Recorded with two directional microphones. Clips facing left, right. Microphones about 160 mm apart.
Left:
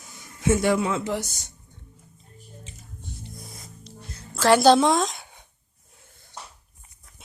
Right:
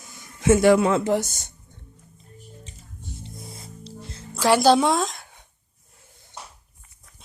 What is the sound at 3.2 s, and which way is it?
Music, 30° right (ahead or behind).